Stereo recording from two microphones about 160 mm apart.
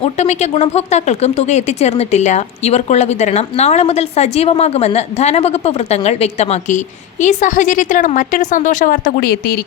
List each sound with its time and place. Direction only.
0.0 s speech: 40° left (ahead or behind); by 9.6 s 75° left (ahead or behind)